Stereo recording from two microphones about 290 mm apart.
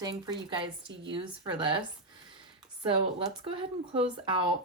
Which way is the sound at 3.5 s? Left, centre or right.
Centre.